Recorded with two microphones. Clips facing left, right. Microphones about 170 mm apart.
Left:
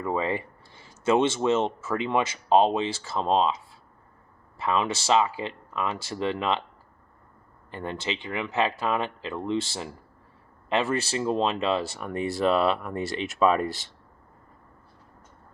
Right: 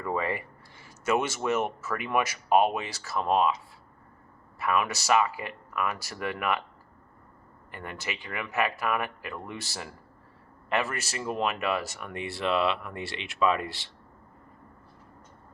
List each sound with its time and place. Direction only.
0.0 s speech: 20° left (ahead or behind)
4.5 s speech: 25° left (ahead or behind)
7.7 s speech: 30° left (ahead or behind); by 13.9 s 45° left (ahead or behind)